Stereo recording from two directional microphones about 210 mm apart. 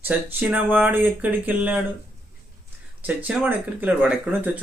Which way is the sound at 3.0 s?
10° right (ahead or behind).